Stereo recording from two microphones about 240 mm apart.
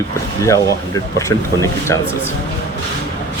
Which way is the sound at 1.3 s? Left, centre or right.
Centre.